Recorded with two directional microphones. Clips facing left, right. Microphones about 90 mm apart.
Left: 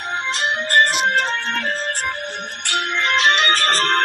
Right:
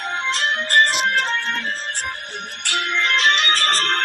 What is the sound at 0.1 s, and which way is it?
Music, 10° left (ahead or behind).